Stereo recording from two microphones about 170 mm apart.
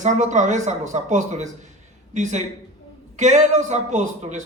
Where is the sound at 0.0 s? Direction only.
45° right (ahead or behind).